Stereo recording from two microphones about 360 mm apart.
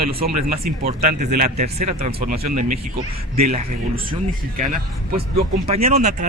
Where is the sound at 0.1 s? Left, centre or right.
Right.